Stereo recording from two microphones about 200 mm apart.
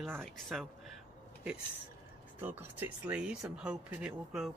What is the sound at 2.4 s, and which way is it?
Speech, 10° right (ahead or behind).